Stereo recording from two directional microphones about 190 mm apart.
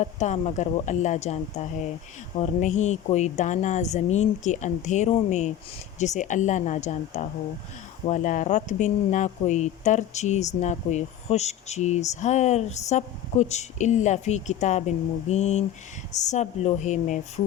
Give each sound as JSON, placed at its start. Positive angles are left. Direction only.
{"t": 0.0, "sound": "speech", "side_deg": 40}